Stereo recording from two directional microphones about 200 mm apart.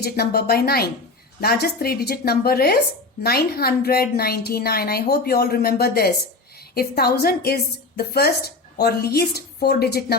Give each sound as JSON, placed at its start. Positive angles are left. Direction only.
{"t": 0.0, "sound": "a woman's voice", "side_deg": 50}